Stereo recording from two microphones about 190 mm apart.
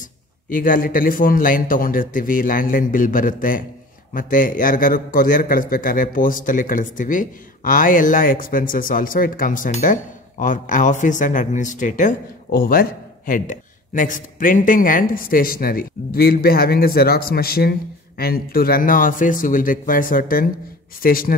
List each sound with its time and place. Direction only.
0.5 s speech: 45° left (ahead or behind)